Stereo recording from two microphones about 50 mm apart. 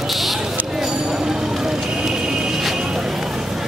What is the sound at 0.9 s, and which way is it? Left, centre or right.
Vehicle, centre.